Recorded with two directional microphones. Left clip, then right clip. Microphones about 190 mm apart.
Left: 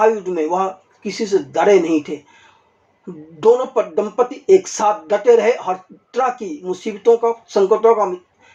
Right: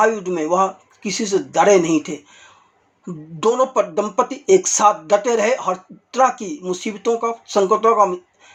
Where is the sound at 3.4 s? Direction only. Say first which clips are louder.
Left 2 dB; 25° right (ahead or behind).